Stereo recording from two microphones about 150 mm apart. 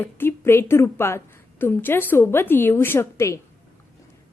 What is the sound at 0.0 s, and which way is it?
A woman's voice, 15° left (ahead or behind).